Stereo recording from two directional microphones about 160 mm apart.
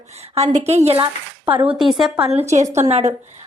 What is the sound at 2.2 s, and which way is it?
Speech, 40° right (ahead or behind).